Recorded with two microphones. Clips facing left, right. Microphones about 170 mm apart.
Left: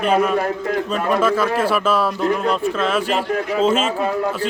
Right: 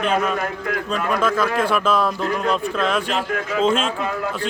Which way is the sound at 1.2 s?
5° left (ahead or behind).